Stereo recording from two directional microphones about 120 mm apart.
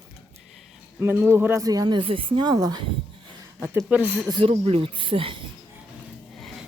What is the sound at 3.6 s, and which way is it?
Speech, 20° right (ahead or behind).